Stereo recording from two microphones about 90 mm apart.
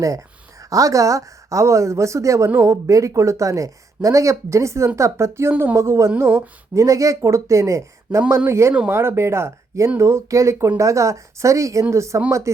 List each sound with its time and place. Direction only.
0.7 s speech: 40° right (ahead or behind)
6.8 s speech: 40° right (ahead or behind)